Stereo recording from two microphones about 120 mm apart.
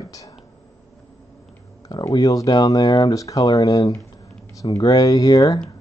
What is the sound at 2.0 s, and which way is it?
Speech, 30° left (ahead or behind).